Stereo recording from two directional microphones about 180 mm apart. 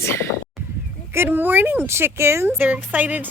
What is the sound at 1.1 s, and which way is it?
Speech, 10° right (ahead or behind).